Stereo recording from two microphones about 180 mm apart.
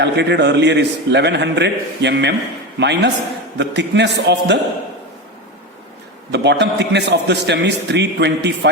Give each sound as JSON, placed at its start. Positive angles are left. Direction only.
{"t": 0.0, "sound": "a man's voice", "side_deg": -75}
{"t": 6.3, "sound": "a man's voice", "side_deg": -70}